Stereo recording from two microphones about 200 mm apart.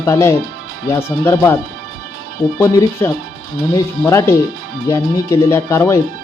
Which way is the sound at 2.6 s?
15° left (ahead or behind).